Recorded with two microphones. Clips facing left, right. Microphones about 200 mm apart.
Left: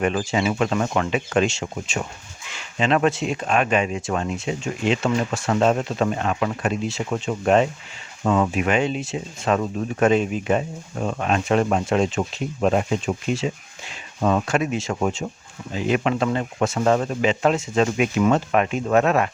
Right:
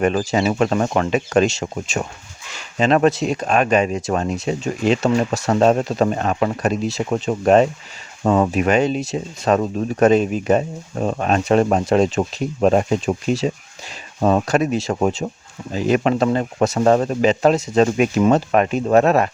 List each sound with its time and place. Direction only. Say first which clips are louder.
0.0 s speech: right 4 dB; 40° right (ahead or behind)